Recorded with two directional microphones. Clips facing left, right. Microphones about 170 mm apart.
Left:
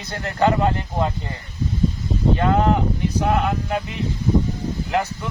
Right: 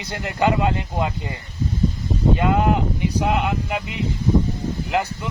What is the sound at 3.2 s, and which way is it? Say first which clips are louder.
Speech: left 1 dB; 15° right (ahead or behind).